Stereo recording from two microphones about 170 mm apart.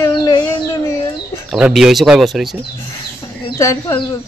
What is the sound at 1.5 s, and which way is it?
A man's voice, 5° right (ahead or behind).